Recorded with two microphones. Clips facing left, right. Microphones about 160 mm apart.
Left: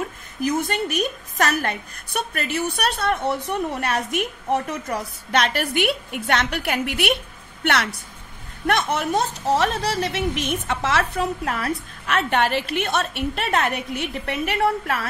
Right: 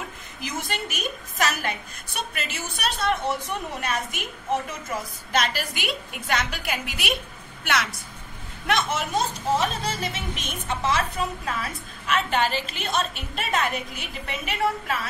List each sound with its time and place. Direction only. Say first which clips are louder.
0.4 s a woman's voice: left 9 dB; 55° left (ahead or behind)